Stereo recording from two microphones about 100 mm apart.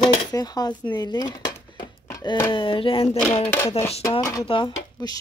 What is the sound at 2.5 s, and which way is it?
Speech, 60° left (ahead or behind).